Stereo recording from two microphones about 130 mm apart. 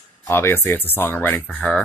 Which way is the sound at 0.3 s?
15° left (ahead or behind).